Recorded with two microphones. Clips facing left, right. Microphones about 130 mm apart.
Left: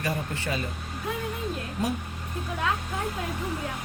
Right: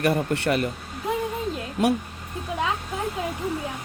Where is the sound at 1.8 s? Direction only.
85° right.